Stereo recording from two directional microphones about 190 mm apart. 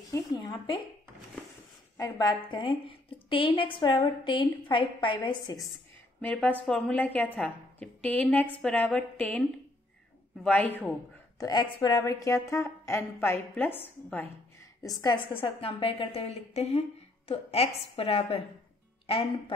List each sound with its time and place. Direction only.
0.1 s speech: 20° left (ahead or behind)
2.0 s a woman's voice: 20° left (ahead or behind)
6.2 s a woman's voice: 10° left (ahead or behind)
11.3 s a woman's voice: 20° left (ahead or behind)
15.0 s a woman's voice: 25° left (ahead or behind)